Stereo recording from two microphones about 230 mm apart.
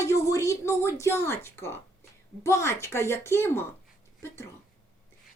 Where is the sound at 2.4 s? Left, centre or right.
Centre.